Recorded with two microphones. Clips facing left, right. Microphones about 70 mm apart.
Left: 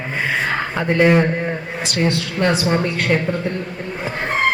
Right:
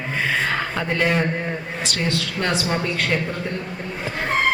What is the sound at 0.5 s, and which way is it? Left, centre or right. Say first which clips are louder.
Speech: left 5 dB; centre.